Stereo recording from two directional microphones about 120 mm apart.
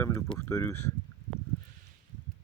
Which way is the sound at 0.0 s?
20° left (ahead or behind).